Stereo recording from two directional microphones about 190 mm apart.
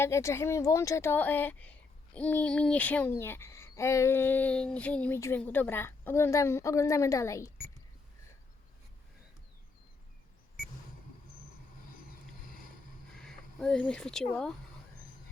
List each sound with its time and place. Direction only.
0.0 s speech: 15° left (ahead or behind)
12.5 s boat: 45° left (ahead or behind)
13.1 s speech: 5° left (ahead or behind)